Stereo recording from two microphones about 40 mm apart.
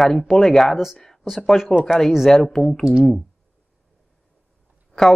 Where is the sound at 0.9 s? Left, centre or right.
Centre.